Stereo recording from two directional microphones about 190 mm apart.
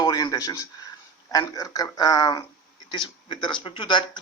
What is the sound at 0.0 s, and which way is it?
A man's voice, 20° left (ahead or behind).